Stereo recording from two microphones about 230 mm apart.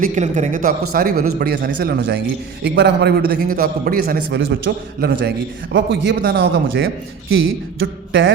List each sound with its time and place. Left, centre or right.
0.0 s a man's voice: right